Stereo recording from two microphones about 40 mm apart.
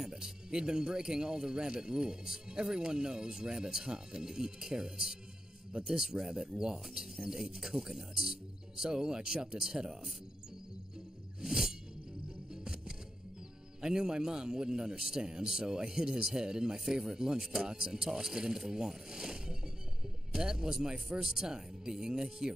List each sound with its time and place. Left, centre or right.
0.0 s speech: centre
11.4 s music: centre
13.7 s speech: centre